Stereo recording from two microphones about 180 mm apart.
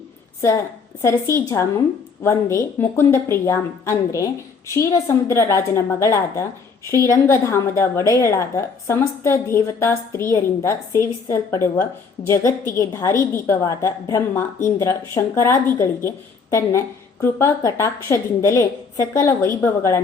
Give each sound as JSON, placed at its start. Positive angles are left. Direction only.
{"t": 1.0, "sound": "a woman's voice", "side_deg": 15}